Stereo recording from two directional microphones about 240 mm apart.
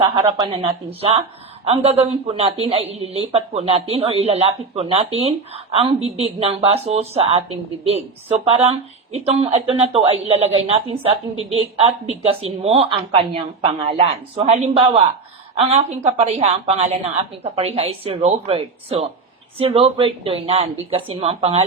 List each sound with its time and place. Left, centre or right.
0.0 s a woman's voice: centre
8.4 s a woman's voice: right